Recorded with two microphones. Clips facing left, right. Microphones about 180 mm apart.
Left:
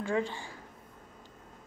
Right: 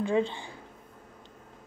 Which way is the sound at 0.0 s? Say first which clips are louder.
Right 4 dB; 15° right (ahead or behind).